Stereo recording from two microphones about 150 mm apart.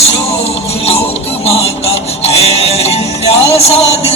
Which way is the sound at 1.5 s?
45° left (ahead or behind).